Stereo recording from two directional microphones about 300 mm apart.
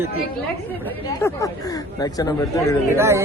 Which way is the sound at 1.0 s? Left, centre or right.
Centre.